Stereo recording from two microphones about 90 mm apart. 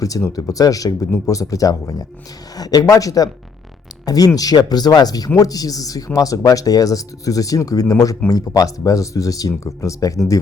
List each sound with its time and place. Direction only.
0.0 s speech: 35° left (ahead or behind)